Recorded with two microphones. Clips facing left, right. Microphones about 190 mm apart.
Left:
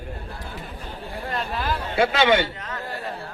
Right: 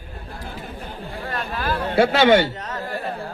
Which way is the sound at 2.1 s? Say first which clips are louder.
Right 4 dB; 40° right (ahead or behind).